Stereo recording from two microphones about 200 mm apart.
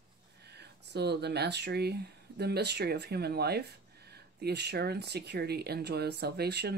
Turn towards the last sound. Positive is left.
turn(degrees=-55)  # may be behind; listen again after turning